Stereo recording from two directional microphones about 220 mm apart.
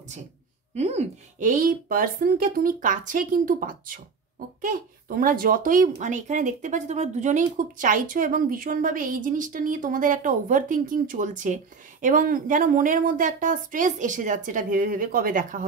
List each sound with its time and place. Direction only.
0.7 s speech: 30° right (ahead or behind)